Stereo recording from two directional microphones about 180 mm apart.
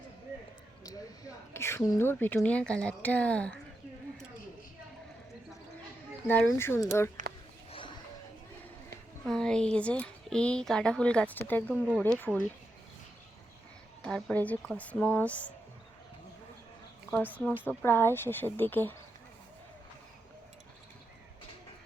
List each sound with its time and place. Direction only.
1.5 s a woman's voice: 15° left (ahead or behind)
6.2 s a woman's voice: 10° left (ahead or behind)
7.2 s a sound: 45° right (ahead or behind)
7.7 s a sound: 30° left (ahead or behind)
9.2 s a woman's voice: 5° left (ahead or behind)
14.0 s a woman's voice: 5° left (ahead or behind)
17.1 s a woman's voice: 10° left (ahead or behind)